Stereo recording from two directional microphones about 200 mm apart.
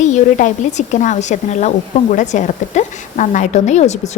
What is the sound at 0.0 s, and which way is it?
A woman's voice, 40° left (ahead or behind).